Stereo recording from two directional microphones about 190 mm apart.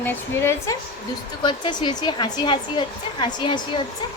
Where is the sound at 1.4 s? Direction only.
25° left (ahead or behind).